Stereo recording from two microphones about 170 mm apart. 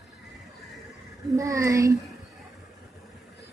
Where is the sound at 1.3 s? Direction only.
20° right (ahead or behind).